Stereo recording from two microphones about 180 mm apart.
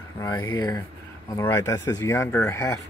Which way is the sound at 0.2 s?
25° left (ahead or behind).